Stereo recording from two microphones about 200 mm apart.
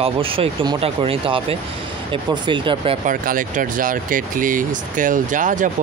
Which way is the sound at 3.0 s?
45° right (ahead or behind).